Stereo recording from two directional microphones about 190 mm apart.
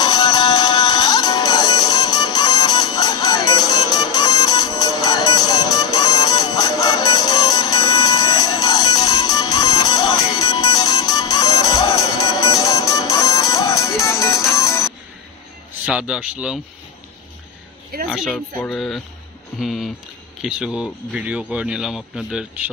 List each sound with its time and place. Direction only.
0.0 s music: 20° left (ahead or behind)
15.8 s speech: 5° right (ahead or behind)
18.0 s speech: centre (ahead or behind)